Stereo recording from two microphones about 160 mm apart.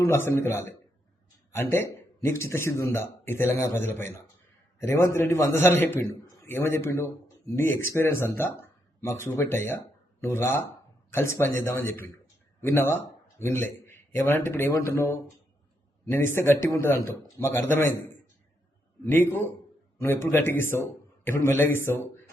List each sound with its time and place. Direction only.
0.1 s a man's voice: 15° left (ahead or behind)
19.0 s a man's voice: 15° left (ahead or behind)